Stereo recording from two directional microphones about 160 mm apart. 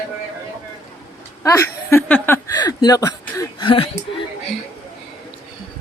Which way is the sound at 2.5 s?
25° left (ahead or behind).